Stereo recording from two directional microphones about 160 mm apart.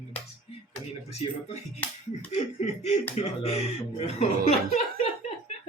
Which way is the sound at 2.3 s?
45° left (ahead or behind).